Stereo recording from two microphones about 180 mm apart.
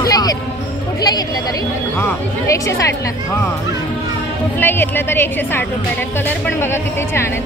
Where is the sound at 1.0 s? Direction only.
20° left (ahead or behind).